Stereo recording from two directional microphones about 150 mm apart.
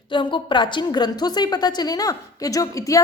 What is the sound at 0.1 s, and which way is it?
A woman's voice, 30° left (ahead or behind).